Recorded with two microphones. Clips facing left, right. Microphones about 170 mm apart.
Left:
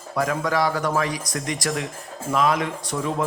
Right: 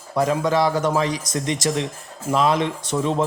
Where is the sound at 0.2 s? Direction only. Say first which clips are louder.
Right 3 dB; 25° right (ahead or behind).